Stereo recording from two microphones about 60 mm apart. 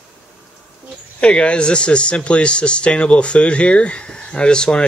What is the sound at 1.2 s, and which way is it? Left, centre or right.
Speech, centre.